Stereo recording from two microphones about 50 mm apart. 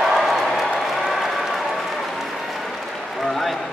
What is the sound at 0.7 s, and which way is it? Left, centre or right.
Applause, centre.